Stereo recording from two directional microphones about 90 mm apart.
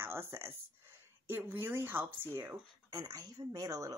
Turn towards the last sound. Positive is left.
turn(degrees=-40)  # may be behind; listen again after turning